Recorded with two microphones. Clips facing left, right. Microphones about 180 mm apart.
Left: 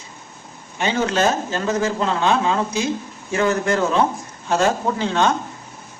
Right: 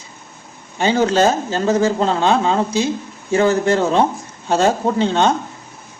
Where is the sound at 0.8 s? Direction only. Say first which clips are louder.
Right 5 dB; 30° right (ahead or behind).